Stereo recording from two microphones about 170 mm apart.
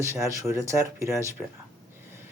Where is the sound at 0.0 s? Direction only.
15° right (ahead or behind).